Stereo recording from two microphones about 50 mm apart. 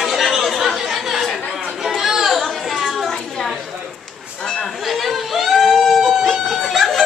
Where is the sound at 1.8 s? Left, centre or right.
Centre.